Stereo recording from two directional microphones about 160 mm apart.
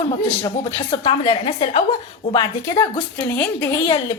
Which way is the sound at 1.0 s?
40° left (ahead or behind).